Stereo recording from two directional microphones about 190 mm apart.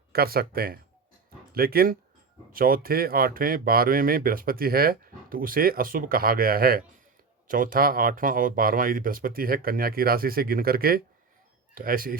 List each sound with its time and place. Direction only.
0.1 s speech: 55° right (ahead or behind)